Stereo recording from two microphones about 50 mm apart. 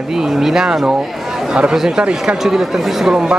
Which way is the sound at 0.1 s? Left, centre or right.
Centre.